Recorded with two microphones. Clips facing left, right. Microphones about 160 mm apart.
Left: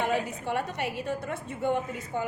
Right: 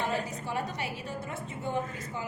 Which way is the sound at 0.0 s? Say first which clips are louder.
Left 4 dB; 60° left (ahead or behind).